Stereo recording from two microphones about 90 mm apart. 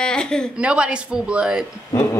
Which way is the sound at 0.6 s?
10° right (ahead or behind).